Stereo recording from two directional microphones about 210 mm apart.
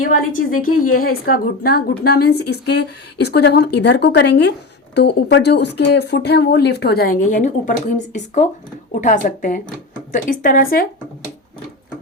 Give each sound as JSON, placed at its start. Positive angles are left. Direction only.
{"t": 0.3, "sound": "a woman's voice", "side_deg": 40}